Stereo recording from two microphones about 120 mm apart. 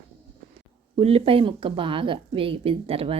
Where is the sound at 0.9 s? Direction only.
55° right (ahead or behind).